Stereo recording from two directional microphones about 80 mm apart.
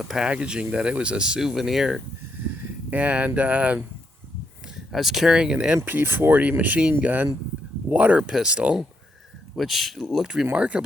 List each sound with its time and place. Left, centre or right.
0.0 s speech: centre
2.9 s speech: centre
4.9 s speech: centre
5.7 s speech: right
9.6 s speech: centre
10.4 s speech: centre